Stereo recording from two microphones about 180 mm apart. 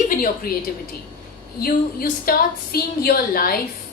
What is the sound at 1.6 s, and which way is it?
A woman's voice, 55° left (ahead or behind).